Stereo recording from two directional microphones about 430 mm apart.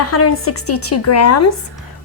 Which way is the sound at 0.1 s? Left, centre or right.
Left.